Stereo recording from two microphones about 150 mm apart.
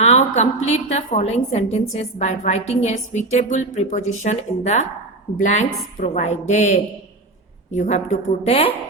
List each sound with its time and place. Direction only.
0.0 s a woman's voice: 50° left (ahead or behind)